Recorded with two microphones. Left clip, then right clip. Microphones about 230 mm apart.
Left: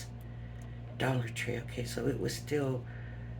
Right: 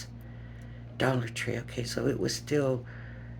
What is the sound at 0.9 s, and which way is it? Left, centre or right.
Speech, right.